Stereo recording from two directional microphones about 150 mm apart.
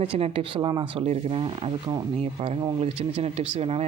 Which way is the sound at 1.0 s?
45° right (ahead or behind).